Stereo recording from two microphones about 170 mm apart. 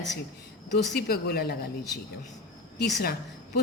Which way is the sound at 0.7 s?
80° left.